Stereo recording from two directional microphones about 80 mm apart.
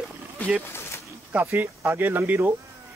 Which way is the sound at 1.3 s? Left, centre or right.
Centre.